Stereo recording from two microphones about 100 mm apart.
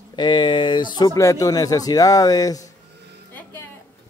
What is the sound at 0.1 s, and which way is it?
Speech, 50° left (ahead or behind).